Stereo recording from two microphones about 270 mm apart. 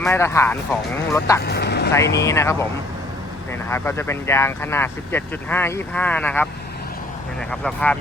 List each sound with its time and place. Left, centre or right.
0.0 s speech: centre
1.4 s speech: left
2.1 s speech: centre
3.7 s speech: centre
7.6 s speech: centre